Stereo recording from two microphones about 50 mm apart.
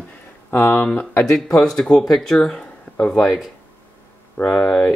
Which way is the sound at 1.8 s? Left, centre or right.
Centre.